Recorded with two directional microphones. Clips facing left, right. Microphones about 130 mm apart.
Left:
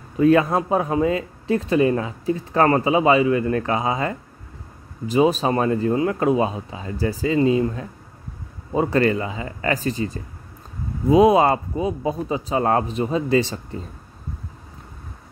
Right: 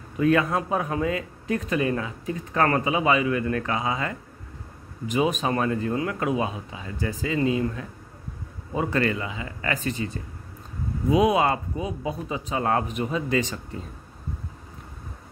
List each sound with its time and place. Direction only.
0.2 s speech: 30° left (ahead or behind)